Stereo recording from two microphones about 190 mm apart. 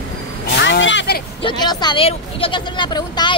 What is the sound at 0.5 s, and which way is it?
Speech, 70° left (ahead or behind).